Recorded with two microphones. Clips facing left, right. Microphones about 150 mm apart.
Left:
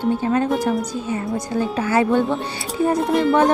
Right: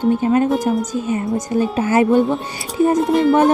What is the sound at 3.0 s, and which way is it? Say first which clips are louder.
Speech: right 3 dB; centre (ahead or behind).